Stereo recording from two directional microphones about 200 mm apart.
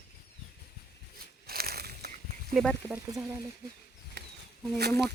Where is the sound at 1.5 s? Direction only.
50° right (ahead or behind).